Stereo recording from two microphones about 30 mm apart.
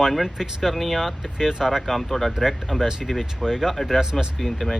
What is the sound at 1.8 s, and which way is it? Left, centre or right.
Speech, centre.